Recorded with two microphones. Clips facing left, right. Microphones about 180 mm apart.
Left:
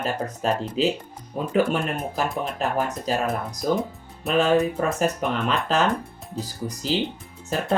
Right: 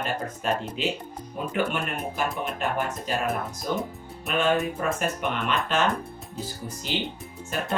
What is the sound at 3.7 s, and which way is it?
Speech, 35° left (ahead or behind).